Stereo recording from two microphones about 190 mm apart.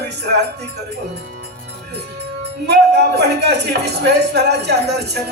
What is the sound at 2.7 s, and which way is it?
Speech, 60° right (ahead or behind).